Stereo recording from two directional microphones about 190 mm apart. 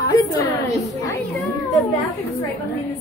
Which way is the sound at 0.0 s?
20° left (ahead or behind).